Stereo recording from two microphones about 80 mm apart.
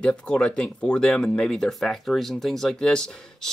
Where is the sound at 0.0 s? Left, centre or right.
Centre.